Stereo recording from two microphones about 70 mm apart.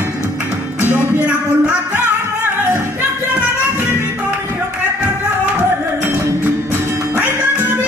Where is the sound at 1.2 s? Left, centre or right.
Centre.